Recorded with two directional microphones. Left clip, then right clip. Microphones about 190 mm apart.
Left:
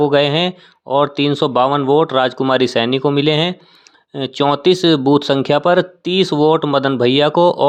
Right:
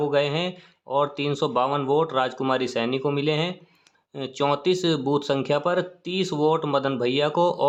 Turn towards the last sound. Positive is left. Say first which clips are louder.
# left 9 dB
turn(degrees=35)  # may be behind; listen again after turning